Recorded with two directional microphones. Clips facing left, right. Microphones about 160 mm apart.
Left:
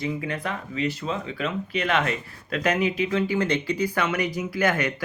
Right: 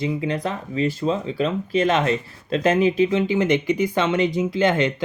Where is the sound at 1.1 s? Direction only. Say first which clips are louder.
Right 6 dB; 30° right (ahead or behind).